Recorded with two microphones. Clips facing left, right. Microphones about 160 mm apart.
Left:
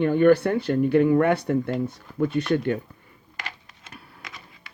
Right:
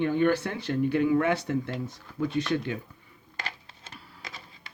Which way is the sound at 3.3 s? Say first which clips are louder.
Even; 30° right (ahead or behind).